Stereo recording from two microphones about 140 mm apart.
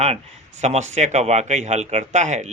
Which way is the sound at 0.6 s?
55° right (ahead or behind).